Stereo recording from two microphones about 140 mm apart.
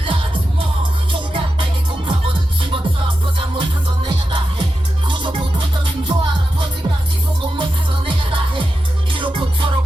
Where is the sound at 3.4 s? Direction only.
35° right (ahead or behind).